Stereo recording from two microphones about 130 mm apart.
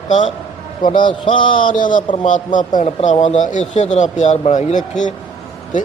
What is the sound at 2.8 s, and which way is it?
Speech, 65° left (ahead or behind).